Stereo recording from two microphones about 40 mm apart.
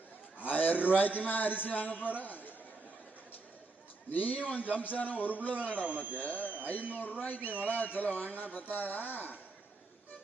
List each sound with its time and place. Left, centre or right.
0.4 s a sound: left
0.9 s speech: left
4.1 s speech: left
5.8 s speech: right
6.1 s speech: left
6.4 s speech: right
7.2 s speech: left